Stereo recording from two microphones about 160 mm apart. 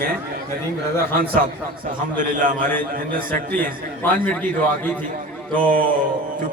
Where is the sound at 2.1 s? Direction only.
60° right (ahead or behind).